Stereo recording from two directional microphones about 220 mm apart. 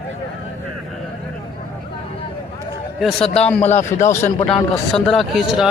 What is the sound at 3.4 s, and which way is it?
Speech, 30° left (ahead or behind).